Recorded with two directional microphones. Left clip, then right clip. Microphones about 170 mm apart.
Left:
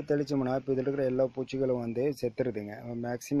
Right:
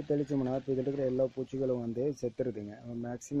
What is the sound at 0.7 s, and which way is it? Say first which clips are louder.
Speech: left 2 dB; 5° left (ahead or behind).